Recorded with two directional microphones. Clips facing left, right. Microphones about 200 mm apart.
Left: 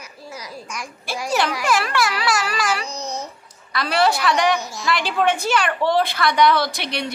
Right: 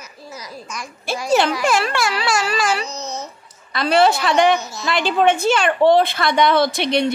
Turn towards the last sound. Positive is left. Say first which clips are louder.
# right 8 dB
turn(degrees=-25)  # may be behind; listen again after turning